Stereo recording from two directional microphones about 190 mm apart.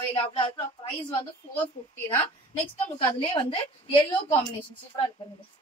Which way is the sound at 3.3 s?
25° left (ahead or behind).